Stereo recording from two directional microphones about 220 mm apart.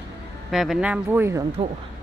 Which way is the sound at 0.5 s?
Centre (ahead or behind).